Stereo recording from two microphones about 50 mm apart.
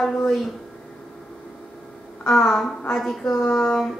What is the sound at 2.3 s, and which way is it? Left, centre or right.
Speech, centre.